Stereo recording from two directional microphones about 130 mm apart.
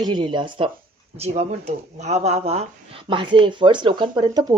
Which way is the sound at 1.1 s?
55° right (ahead or behind).